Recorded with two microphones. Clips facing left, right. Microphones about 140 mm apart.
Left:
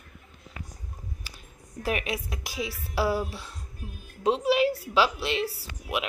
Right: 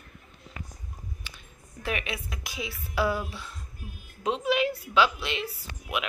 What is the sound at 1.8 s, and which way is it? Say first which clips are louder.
A woman's voice: left 3 dB; 40° left (ahead or behind).